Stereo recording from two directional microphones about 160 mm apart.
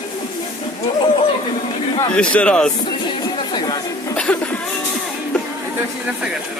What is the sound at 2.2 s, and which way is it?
Speech, 5° left (ahead or behind).